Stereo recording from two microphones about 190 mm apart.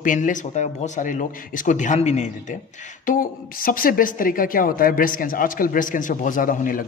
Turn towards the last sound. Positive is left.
turn(degrees=45)  # may be behind; listen again after turning